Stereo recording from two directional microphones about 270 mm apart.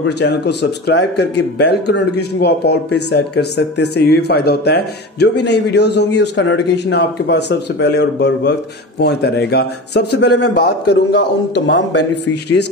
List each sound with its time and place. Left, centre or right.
0.0 s a man's voice: left